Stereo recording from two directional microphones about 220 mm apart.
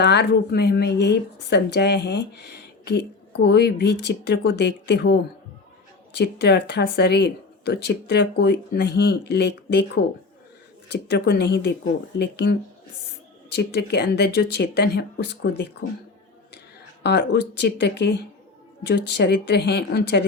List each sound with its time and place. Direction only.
0.0 s speech: 50° left (ahead or behind)
6.1 s speech: 50° left (ahead or behind)
17.0 s speech: 50° left (ahead or behind)